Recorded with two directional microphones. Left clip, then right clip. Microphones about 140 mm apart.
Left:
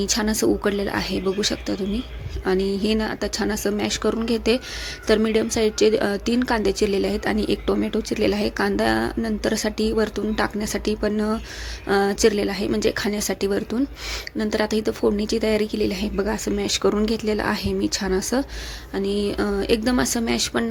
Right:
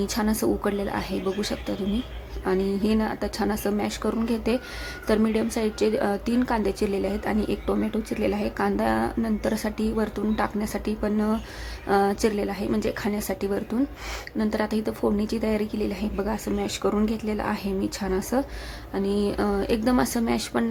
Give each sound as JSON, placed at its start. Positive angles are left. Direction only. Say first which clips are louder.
{"t": 0.0, "sound": "a woman's voice", "louder": "left 4 dB", "side_deg": 15}